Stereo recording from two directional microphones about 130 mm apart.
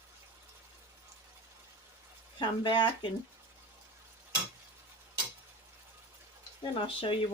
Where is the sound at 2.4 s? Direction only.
35° left (ahead or behind).